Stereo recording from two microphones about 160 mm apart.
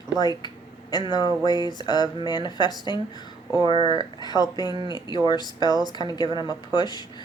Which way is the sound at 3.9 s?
25° left (ahead or behind).